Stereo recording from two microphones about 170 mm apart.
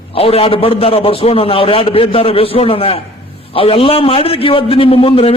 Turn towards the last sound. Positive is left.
turn(degrees=35)  # may be behind; listen again after turning